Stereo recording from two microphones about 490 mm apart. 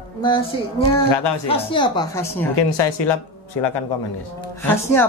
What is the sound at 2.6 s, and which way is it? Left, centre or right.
Speech, left.